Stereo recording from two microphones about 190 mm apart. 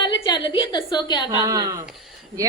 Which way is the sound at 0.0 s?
25° left (ahead or behind).